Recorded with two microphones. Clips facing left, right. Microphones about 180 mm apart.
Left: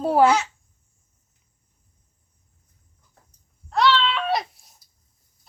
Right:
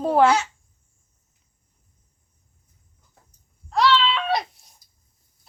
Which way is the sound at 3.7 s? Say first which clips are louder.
Right 1 dB; centre (ahead or behind).